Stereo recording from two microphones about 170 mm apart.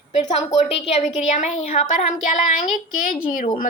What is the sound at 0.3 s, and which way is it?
A woman's voice, 40° left (ahead or behind).